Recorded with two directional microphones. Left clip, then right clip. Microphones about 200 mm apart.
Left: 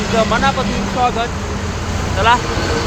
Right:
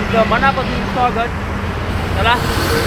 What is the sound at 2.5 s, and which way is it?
Speech, 60° right (ahead or behind).